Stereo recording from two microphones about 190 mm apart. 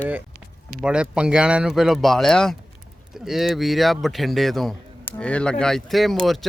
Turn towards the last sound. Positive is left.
turn(degrees=0)  # may be behind; listen again after turning